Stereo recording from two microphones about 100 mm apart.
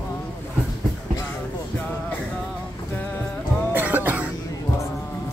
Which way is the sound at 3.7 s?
20° right (ahead or behind).